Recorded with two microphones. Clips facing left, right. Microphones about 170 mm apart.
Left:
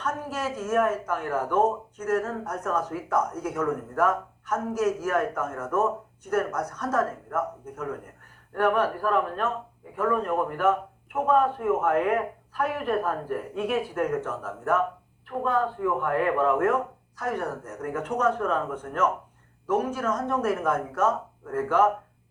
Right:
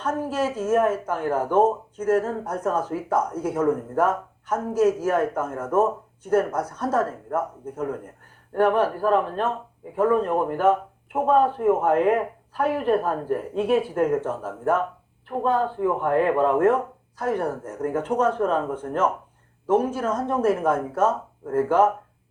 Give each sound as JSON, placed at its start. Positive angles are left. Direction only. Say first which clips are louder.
{"t": 0.0, "sound": "speech", "louder": "right 5 dB", "side_deg": -30}